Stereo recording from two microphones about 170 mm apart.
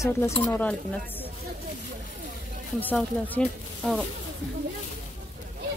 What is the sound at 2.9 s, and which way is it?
Speech, 5° left (ahead or behind).